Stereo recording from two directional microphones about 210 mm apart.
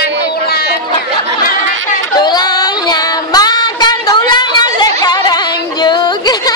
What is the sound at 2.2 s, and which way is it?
Child singing, 20° left (ahead or behind).